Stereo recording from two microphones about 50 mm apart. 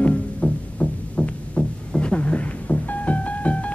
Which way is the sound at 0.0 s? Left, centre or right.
Left.